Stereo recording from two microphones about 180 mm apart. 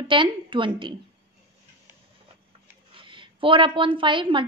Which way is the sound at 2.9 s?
30° right (ahead or behind).